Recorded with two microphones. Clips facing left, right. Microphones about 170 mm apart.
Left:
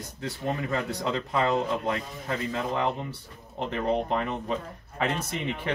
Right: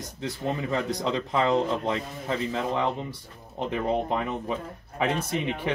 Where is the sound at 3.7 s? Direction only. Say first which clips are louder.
Even; 10° right (ahead or behind).